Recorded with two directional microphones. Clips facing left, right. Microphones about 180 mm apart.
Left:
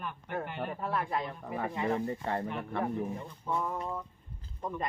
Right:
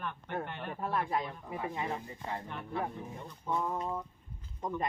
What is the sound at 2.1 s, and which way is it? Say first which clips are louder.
Speech: left 7 dB; 65° left (ahead or behind).